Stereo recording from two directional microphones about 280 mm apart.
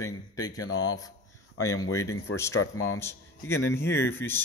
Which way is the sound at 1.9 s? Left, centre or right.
Centre.